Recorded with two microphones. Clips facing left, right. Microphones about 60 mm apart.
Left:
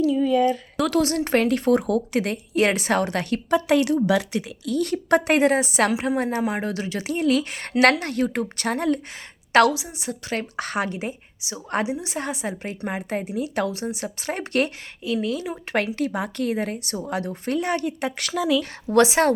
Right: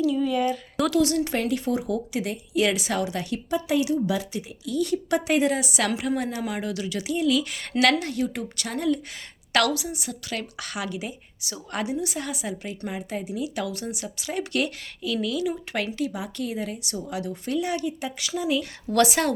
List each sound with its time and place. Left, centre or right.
0.2 s speech: left
9.5 s speech: left
11.3 s a woman's voice: left
18.9 s speech: left